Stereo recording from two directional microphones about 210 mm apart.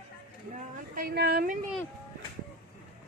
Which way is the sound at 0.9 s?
50° right (ahead or behind).